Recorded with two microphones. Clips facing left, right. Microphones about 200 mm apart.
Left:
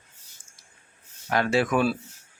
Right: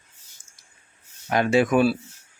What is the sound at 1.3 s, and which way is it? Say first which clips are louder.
Speech: right 4 dB; 15° right (ahead or behind).